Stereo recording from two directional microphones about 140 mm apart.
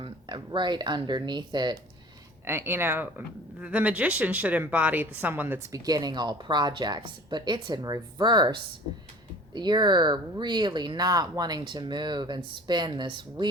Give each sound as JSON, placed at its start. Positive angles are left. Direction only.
{"t": 0.0, "sound": "speech", "side_deg": -35}
{"t": 2.5, "sound": "speech", "side_deg": -15}
{"t": 5.8, "sound": "speech", "side_deg": -30}
{"t": 9.6, "sound": "speech", "side_deg": -30}